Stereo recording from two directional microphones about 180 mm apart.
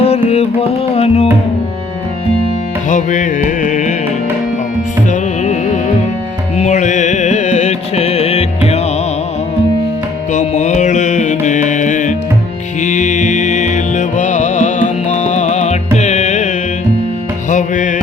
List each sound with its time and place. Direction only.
0.0 s music: 35° left (ahead or behind)
2.9 s music: 45° left (ahead or behind)
6.6 s music: 40° left (ahead or behind)
10.3 s music: 40° left (ahead or behind)
17.5 s music: 45° left (ahead or behind)